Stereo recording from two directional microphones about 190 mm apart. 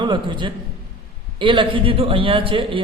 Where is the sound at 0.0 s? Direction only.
25° right (ahead or behind).